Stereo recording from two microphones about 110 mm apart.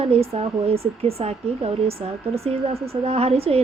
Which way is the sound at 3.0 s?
65° right (ahead or behind).